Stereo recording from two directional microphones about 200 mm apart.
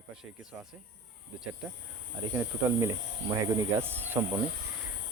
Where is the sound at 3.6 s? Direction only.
10° right (ahead or behind).